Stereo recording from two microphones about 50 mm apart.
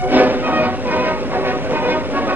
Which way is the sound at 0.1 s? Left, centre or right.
Right.